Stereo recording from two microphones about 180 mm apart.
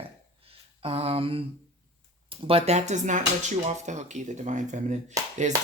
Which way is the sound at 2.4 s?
35° right (ahead or behind).